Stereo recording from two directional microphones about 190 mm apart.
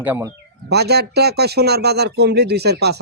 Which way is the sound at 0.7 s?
60° right (ahead or behind).